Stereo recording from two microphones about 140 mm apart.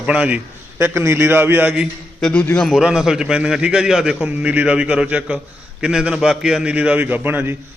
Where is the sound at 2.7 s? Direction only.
5° right (ahead or behind).